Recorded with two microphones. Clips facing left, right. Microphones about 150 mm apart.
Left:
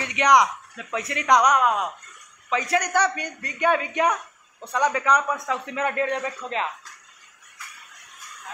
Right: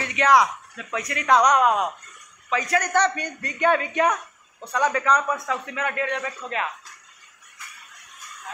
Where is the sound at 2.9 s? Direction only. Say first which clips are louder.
Right 1 dB; 10° left (ahead or behind); by 6.2 s 35° left (ahead or behind).